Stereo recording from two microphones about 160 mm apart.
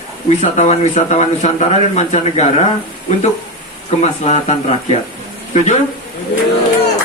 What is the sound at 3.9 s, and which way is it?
Speech, 45° left (ahead or behind).